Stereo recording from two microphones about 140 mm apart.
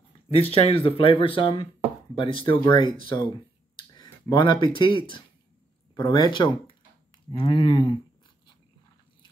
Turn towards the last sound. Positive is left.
turn(degrees=35)  # may be behind; listen again after turning